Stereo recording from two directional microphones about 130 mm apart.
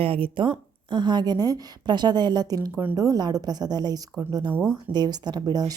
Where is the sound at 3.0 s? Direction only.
30° right (ahead or behind).